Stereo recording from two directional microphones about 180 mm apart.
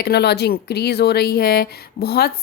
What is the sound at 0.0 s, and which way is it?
A woman's voice, 60° left (ahead or behind).